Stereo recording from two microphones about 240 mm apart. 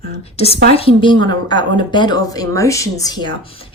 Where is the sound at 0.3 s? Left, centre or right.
Left.